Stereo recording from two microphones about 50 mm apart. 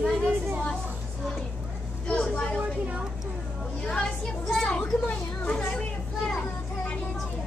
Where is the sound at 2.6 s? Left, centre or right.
Right.